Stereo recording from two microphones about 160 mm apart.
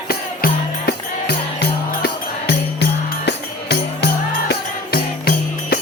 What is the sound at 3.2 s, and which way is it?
Music, 90° left.